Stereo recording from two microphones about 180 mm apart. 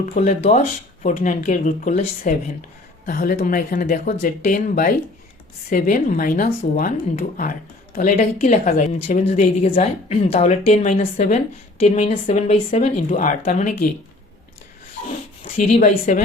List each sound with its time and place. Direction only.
0.0 s speech: 45° left (ahead or behind)
3.1 s speech: 55° left (ahead or behind)
15.4 s speech: 40° left (ahead or behind)